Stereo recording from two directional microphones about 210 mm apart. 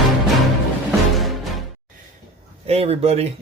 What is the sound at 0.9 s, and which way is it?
Music, centre (ahead or behind).